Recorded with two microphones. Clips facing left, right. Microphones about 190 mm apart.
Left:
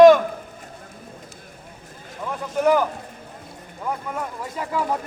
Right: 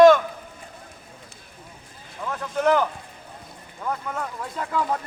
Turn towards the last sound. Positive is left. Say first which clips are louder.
# left 1 dB
turn(degrees=10)  # may be behind; listen again after turning